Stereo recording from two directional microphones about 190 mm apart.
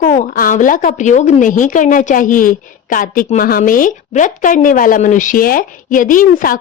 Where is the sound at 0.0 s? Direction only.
50° left (ahead or behind).